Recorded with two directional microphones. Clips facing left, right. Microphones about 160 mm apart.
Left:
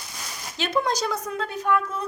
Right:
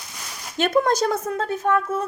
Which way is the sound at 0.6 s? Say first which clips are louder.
Right 6 dB; 50° right (ahead or behind).